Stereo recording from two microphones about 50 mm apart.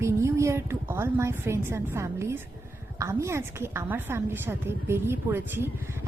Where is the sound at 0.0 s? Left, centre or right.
Right.